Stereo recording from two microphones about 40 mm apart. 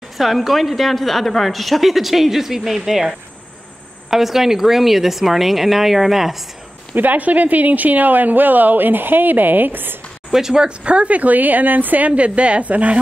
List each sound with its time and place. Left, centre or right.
0.2 s a woman's voice: centre
7.0 s speech: right
10.3 s speech: centre
10.8 s speech: right
12.2 s a woman's voice: right